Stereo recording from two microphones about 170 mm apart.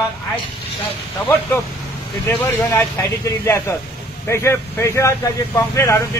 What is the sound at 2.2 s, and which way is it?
Speech, 15° left (ahead or behind).